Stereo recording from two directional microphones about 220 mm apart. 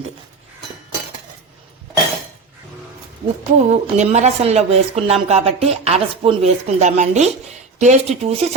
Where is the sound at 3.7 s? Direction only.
30° right (ahead or behind).